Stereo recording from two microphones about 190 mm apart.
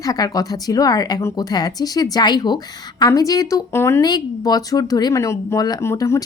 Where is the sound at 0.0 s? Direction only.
20° left (ahead or behind).